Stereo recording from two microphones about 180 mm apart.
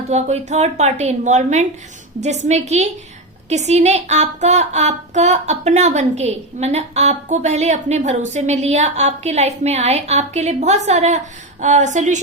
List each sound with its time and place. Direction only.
0.1 s speech: 40° right (ahead or behind)